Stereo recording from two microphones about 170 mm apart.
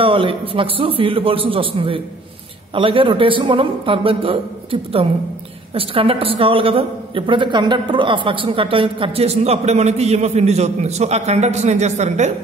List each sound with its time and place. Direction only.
0.0 s a woman's voice: 30° right (ahead or behind)